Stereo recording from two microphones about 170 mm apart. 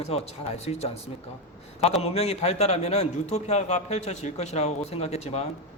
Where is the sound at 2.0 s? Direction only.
40° left (ahead or behind).